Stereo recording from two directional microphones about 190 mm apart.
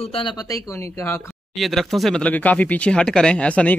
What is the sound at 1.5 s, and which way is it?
Speech, centre (ahead or behind).